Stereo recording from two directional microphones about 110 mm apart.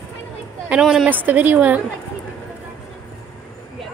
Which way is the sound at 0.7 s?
5° right (ahead or behind).